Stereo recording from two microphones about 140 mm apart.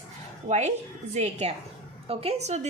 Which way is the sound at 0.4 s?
55° right (ahead or behind).